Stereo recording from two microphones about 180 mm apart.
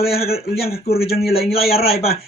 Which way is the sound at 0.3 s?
60° left (ahead or behind).